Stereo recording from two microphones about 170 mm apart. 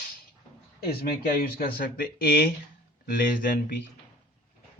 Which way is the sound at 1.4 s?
55° left (ahead or behind).